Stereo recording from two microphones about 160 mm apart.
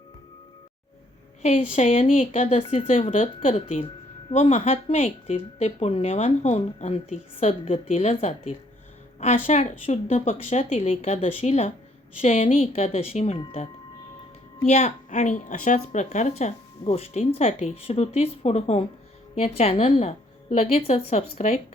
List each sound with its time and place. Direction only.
1.4 s a woman's voice: 45° left (ahead or behind)
2.6 s speech: 35° left (ahead or behind)
3.1 s a woman's voice: 55° left (ahead or behind); by 7.7 s 40° left (ahead or behind)
7.7 s a woman's voice: 50° left (ahead or behind)
12.2 s speech: 50° left (ahead or behind)
14.7 s a woman's voice: 45° left (ahead or behind)